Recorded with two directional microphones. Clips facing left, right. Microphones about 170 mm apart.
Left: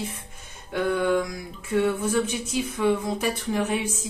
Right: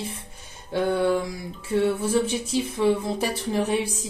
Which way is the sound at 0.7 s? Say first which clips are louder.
Right 1 dB; 30° right (ahead or behind).